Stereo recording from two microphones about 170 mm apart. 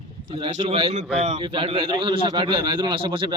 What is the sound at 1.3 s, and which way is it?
A man's voice, 30° right (ahead or behind).